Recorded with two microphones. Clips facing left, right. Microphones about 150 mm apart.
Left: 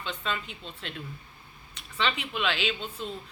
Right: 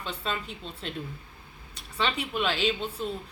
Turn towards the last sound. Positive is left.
turn(degrees=-40)  # may be behind; listen again after turning